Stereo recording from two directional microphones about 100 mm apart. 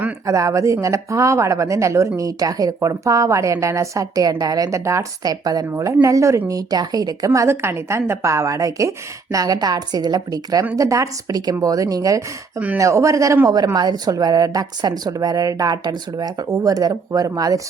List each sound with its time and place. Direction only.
0.3 s speech: 30° right (ahead or behind)